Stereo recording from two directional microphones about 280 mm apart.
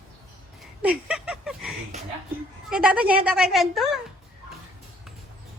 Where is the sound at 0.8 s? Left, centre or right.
Centre.